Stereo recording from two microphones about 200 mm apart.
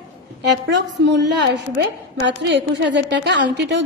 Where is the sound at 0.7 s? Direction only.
60° right (ahead or behind).